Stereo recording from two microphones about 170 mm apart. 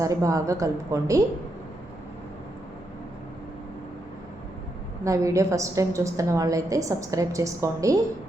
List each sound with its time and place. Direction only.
0.0 s a woman's voice: 20° right (ahead or behind)
5.0 s a woman's voice: 20° right (ahead or behind)